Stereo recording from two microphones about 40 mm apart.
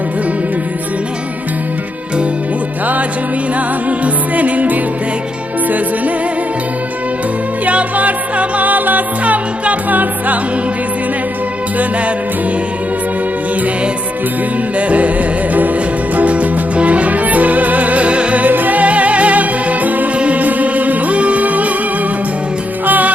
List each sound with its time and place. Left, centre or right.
3.8 s music: right
7.6 s music: right
11.8 s music: right
14.8 s music: right
18.5 s music: right
22.9 s music: right